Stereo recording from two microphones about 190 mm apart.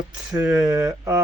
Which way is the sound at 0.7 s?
15° right (ahead or behind).